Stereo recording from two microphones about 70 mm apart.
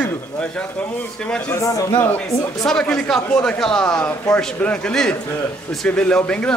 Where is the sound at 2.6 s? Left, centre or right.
Centre.